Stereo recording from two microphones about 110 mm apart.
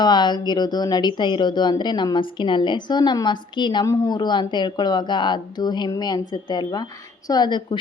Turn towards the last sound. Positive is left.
turn(degrees=40)  # may be behind; listen again after turning